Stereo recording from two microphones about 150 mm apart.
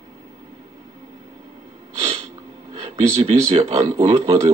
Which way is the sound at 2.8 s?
40° right (ahead or behind).